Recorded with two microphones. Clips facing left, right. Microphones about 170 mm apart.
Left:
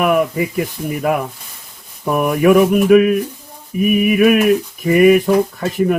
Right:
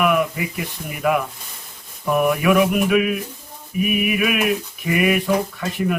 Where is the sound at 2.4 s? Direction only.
45° left (ahead or behind).